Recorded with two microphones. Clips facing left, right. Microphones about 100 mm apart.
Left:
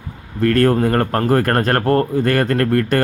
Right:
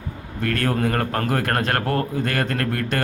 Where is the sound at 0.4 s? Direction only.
40° left (ahead or behind).